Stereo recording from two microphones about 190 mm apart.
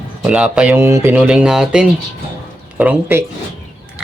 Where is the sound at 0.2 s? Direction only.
5° right (ahead or behind).